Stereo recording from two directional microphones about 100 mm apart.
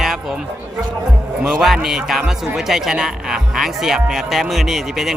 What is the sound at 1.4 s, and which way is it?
Speech, 5° right (ahead or behind).